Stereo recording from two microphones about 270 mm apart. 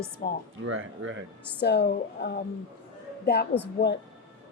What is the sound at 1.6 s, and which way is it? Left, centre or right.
A woman's voice, left.